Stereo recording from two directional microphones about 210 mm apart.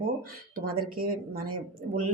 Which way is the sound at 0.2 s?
45° right (ahead or behind).